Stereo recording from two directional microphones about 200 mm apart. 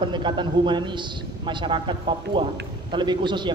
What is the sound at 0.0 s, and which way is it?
A man's voice, 25° right (ahead or behind).